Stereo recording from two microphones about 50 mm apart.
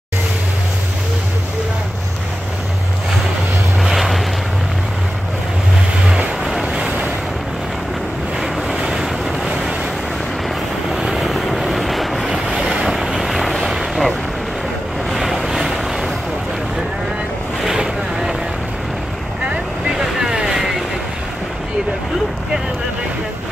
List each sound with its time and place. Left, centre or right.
3.8 s vehicle: centre
6.6 s vehicle: centre
8.4 s vehicle: centre
10.9 s vehicle: centre
12.3 s vehicle: centre
17.6 s boat: centre
19.9 s boat: centre